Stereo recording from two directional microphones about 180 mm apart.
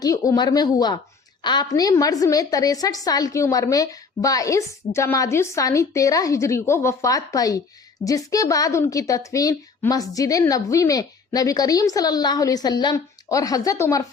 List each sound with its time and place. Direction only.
0.0 s a woman's voice: 20° left (ahead or behind)